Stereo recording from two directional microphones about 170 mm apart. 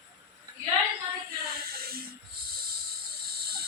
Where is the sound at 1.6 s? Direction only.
65° right (ahead or behind).